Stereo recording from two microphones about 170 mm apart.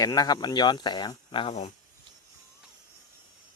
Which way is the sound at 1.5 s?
40° left (ahead or behind).